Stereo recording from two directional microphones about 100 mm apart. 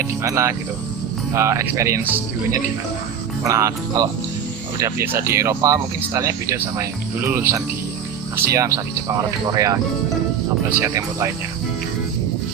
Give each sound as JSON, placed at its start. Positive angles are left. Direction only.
{"t": 0.0, "sound": "music", "side_deg": -25}
{"t": 1.3, "sound": "speech", "side_deg": -25}
{"t": 10.8, "sound": "speech", "side_deg": -30}